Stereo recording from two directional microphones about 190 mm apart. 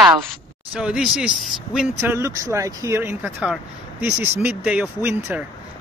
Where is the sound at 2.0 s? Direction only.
10° right (ahead or behind).